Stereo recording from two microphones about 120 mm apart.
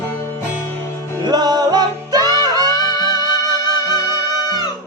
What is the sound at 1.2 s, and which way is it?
Music, 35° right (ahead or behind).